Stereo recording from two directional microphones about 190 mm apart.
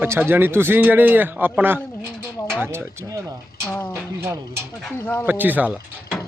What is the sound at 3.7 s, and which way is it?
Speech, 10° left (ahead or behind).